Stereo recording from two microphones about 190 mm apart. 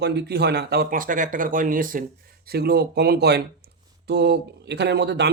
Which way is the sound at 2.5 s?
55° right (ahead or behind).